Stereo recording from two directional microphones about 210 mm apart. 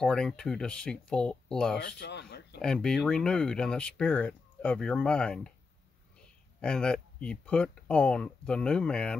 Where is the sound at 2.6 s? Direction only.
5° left (ahead or behind).